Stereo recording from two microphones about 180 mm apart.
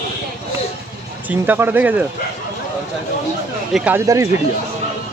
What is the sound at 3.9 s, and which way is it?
Speech, 15° right (ahead or behind).